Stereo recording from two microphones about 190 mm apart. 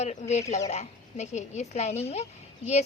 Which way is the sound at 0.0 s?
35° left (ahead or behind).